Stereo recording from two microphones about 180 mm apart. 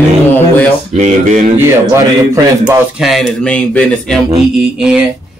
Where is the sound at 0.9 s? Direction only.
40° right (ahead or behind).